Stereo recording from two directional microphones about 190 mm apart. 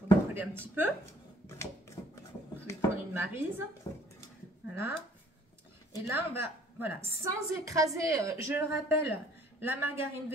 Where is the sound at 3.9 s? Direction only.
15° left (ahead or behind).